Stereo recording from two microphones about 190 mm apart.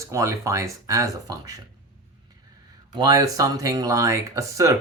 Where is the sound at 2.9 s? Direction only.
20° right (ahead or behind).